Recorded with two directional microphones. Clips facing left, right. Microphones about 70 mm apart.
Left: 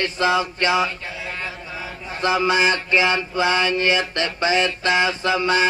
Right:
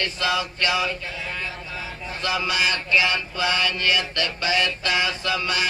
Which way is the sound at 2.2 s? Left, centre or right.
Left.